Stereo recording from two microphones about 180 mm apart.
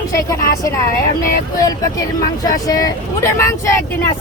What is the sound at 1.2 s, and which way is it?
Speech, 20° left (ahead or behind).